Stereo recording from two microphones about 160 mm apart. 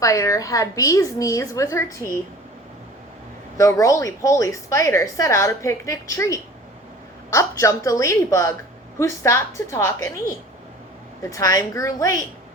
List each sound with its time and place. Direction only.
0.0 s a woman's voice: 20° left (ahead or behind)
3.6 s a woman's voice: 20° left (ahead or behind)
11.2 s a woman's voice: 20° left (ahead or behind)